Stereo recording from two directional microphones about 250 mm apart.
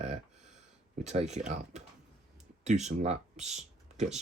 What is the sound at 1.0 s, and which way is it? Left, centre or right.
Speech, right.